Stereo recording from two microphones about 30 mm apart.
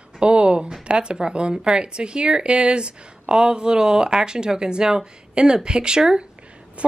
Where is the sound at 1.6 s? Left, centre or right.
Right.